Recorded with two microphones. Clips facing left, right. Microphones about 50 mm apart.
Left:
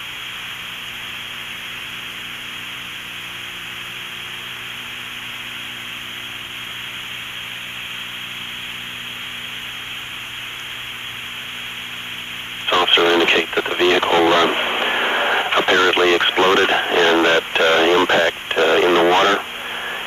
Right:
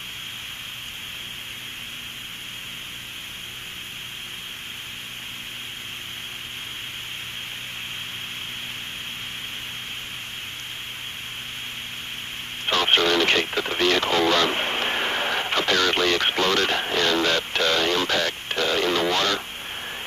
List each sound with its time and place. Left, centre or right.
12.6 s radio: left